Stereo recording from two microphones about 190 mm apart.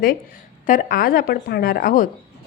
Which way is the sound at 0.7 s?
50° left (ahead or behind).